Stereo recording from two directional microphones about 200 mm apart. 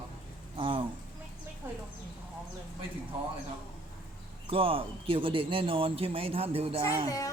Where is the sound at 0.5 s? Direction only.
25° right (ahead or behind).